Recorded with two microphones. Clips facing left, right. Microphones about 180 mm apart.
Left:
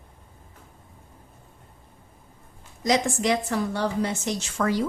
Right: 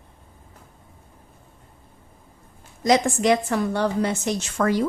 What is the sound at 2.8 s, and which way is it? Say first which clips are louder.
A woman's voice: right 4 dB; 55° right (ahead or behind).